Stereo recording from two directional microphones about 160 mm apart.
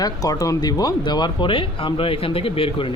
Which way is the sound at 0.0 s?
20° left (ahead or behind).